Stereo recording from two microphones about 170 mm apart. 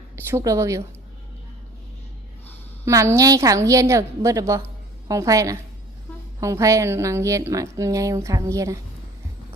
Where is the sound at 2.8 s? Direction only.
15° right (ahead or behind).